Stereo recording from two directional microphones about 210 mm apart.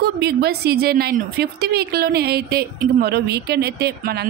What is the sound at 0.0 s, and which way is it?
Speech, 50° right (ahead or behind).